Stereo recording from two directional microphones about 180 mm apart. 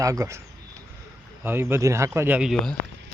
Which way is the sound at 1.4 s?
15° right (ahead or behind).